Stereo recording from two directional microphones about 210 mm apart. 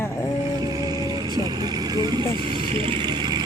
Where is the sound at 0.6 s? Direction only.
20° right (ahead or behind).